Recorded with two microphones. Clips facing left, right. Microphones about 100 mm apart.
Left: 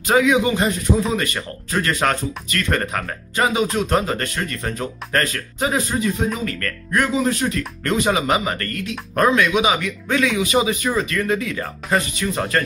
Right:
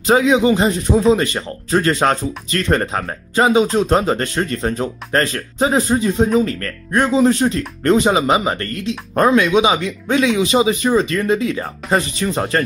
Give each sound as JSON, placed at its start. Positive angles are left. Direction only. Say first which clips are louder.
{"t": 0.0, "sound": "speech", "louder": "right 3 dB", "side_deg": -25}